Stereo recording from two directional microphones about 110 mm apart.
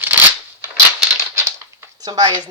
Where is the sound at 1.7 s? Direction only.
30° right (ahead or behind).